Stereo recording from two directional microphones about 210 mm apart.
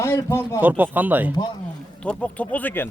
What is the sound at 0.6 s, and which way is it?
Speech, 10° right (ahead or behind).